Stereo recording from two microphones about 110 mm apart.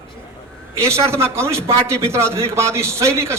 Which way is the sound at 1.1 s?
25° right (ahead or behind).